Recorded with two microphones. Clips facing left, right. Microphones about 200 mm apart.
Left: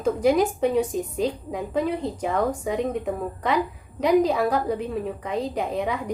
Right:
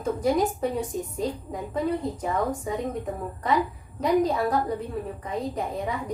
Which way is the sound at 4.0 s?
75° left (ahead or behind).